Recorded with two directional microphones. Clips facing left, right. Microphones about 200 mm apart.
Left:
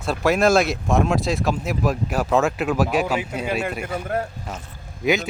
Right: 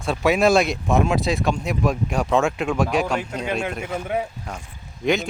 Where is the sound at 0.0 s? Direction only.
Centre (ahead or behind).